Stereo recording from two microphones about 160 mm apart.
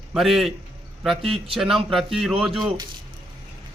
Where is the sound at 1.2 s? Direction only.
35° right (ahead or behind).